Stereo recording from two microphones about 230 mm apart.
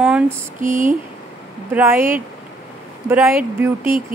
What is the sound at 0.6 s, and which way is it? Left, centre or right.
Speech, right.